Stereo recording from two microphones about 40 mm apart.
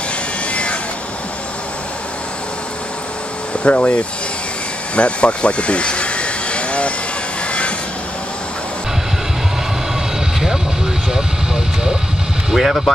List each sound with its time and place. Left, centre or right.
0.5 s vehicle: left
3.6 s speech: left
4.9 s vehicle: left
11.1 s vehicle: centre
12.4 s speech: centre